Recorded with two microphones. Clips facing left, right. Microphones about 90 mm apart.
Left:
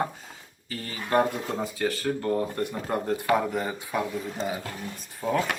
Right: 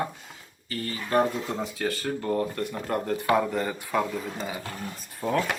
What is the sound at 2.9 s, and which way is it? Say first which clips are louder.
Speech: even; 15° left (ahead or behind).